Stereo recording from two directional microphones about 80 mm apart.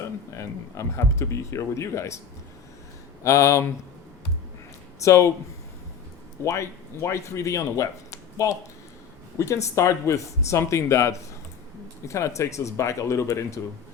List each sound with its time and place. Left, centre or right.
0.3 s speech: left
3.2 s speech: left
4.9 s speech: left
6.4 s speech: left